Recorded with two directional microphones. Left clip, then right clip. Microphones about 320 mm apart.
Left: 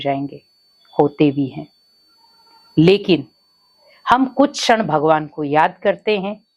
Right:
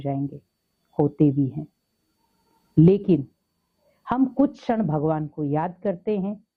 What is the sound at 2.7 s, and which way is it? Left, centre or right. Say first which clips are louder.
Speech: left 6 dB; centre.